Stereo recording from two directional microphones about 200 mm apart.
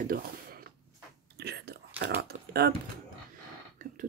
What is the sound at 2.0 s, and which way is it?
Speech, 50° right (ahead or behind).